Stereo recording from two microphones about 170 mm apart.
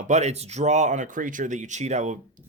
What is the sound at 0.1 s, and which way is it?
Speech, 40° right (ahead or behind).